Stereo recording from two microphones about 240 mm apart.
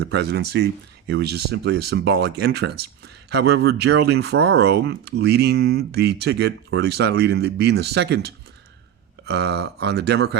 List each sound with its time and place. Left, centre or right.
0.0 s speech: right